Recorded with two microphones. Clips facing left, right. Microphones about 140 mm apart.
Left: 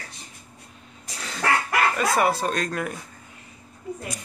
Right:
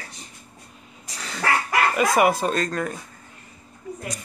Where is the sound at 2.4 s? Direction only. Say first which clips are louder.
Right 2 dB; centre (ahead or behind).